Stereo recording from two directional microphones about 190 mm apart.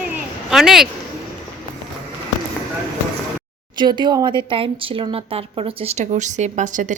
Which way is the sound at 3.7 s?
25° right (ahead or behind).